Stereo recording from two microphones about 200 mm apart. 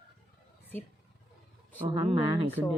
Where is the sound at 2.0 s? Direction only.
30° right (ahead or behind).